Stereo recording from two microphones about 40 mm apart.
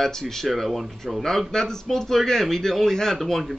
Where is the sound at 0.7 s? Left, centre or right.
Centre.